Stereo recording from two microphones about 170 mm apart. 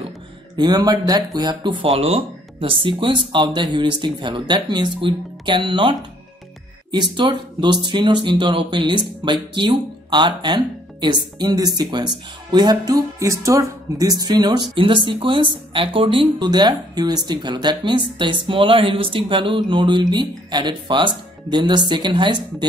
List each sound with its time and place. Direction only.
0.6 s speech: 25° right (ahead or behind)